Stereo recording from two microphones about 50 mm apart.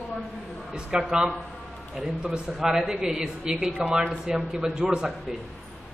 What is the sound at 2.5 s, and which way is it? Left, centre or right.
A man's voice, centre.